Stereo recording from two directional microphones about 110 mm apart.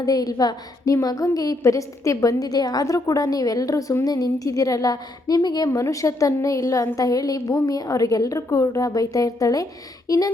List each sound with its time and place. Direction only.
0.0 s a woman's voice: 35° left (ahead or behind)